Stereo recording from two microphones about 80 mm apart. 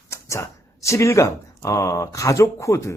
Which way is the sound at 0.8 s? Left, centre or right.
Left.